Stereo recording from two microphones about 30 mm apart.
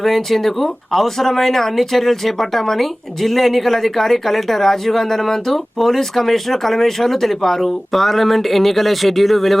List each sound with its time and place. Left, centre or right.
0.0 s speech: centre